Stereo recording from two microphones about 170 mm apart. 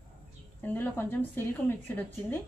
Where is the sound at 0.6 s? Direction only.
10° left (ahead or behind).